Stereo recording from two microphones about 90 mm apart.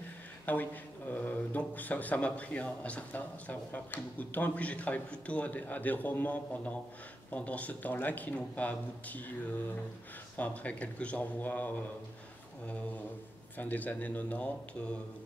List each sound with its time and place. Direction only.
0.5 s speech: 20° left (ahead or behind)
10.3 s speech: 15° left (ahead or behind)
13.6 s speech: 20° left (ahead or behind)